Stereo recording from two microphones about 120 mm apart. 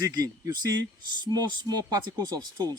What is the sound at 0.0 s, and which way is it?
Speech, 30° right (ahead or behind).